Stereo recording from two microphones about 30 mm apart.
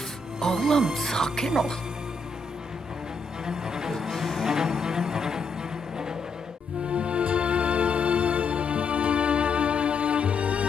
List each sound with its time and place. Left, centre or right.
0.4 s speech: centre
3.4 s music: centre
4.1 s music: centre
4.4 s music: centre
6.8 s music: right